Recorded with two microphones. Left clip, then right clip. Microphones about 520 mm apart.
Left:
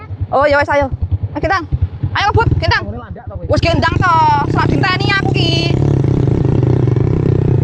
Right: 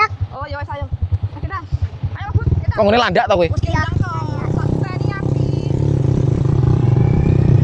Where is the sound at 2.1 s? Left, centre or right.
Left.